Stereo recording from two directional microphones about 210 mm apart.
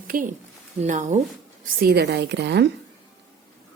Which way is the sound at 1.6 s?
50° right (ahead or behind).